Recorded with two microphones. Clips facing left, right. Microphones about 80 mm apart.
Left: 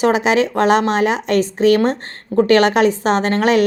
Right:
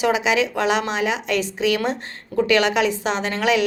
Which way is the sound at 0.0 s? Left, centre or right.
Left.